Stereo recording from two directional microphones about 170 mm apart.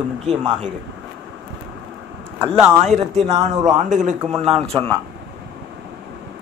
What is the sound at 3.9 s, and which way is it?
Speech, 45° right (ahead or behind).